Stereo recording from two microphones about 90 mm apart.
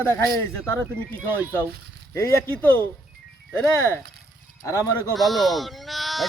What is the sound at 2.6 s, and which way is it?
A man's voice, 20° left (ahead or behind).